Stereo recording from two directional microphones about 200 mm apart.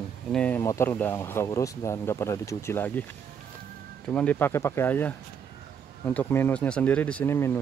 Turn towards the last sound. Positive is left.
turn(degrees=10)  # may be behind; listen again after turning